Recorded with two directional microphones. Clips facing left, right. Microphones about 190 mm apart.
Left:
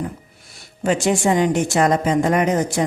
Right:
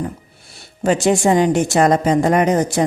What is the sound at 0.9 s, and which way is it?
Speech, 40° right (ahead or behind).